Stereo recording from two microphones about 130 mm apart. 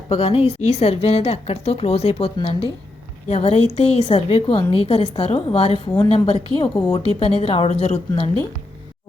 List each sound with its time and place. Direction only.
0.1 s a woman's voice: 50° left (ahead or behind)